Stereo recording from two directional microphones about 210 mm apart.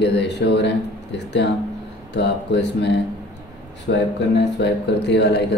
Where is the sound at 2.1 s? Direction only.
55° left (ahead or behind).